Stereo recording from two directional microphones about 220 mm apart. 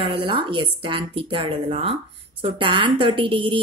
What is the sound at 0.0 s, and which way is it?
A woman's voice, 20° right (ahead or behind).